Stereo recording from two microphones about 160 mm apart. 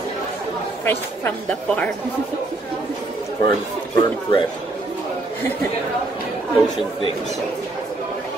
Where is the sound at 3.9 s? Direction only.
30° left (ahead or behind).